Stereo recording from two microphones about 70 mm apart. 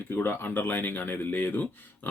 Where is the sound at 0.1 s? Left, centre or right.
Left.